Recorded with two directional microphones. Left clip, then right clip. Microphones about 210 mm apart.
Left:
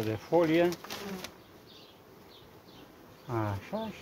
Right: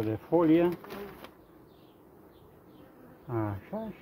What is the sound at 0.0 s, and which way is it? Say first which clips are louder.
Speech: right 1 dB; 30° right (ahead or behind).